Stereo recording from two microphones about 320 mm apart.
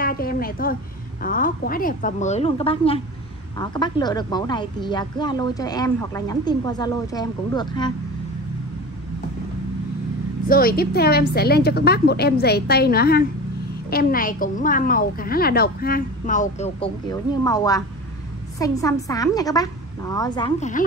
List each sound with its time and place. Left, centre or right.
0.0 s a sound: left
1.2 s a woman's voice: left
10.5 s a woman's voice: left